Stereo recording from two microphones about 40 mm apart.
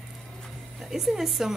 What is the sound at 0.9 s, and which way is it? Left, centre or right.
Speech, centre.